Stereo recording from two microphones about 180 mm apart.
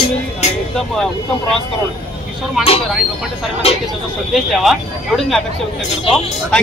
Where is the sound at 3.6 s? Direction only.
35° left (ahead or behind).